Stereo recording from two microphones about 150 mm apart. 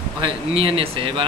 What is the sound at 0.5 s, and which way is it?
Speech, 40° right (ahead or behind).